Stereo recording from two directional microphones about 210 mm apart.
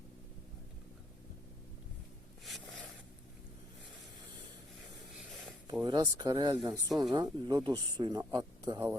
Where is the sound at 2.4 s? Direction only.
Centre (ahead or behind).